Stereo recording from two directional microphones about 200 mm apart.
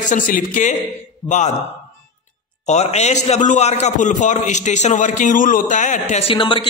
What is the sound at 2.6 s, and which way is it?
A man's voice, 35° left (ahead or behind).